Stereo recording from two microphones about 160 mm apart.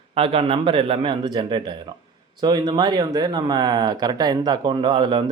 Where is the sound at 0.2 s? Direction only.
35° right (ahead or behind).